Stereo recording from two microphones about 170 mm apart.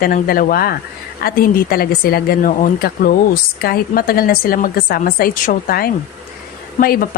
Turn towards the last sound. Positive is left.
turn(degrees=60)  # may be behind; listen again after turning